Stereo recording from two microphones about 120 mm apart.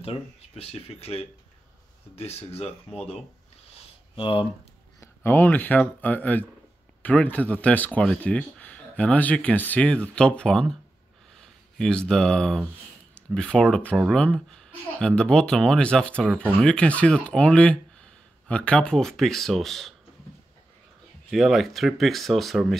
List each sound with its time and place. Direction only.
0.0 s speech: 55° left (ahead or behind)
4.1 s speech: 45° left (ahead or behind)
5.0 s speech: 20° left (ahead or behind); by 19.9 s centre (ahead or behind)
21.3 s speech: centre (ahead or behind)